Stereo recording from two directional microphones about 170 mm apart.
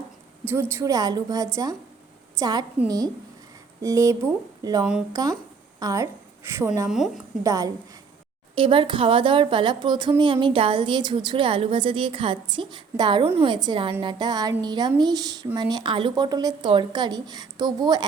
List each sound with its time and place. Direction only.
0.4 s a woman's voice: 15° right (ahead or behind)
6.8 s a woman's voice: centre (ahead or behind)
7.4 s a woman's voice: 20° right (ahead or behind)
8.5 s a woman's voice: 30° right (ahead or behind)